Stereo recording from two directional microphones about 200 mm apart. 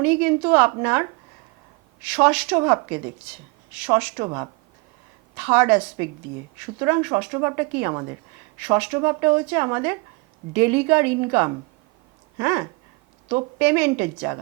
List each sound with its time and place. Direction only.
0.0 s speech: 10° right (ahead or behind)
2.6 s speech: 15° right (ahead or behind)